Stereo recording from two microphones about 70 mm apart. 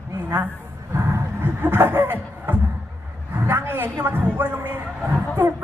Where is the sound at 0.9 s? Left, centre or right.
Right.